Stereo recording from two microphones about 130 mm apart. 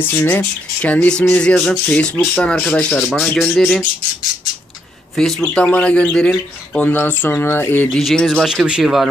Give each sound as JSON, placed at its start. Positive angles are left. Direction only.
{"t": 0.0, "sound": "speech", "side_deg": 15}
{"t": 5.5, "sound": "speech", "side_deg": 5}
{"t": 7.9, "sound": "speech", "side_deg": 0}